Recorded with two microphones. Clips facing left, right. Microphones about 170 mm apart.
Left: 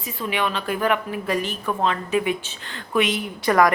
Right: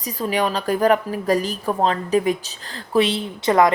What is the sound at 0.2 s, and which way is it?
A woman's voice, 40° right (ahead or behind).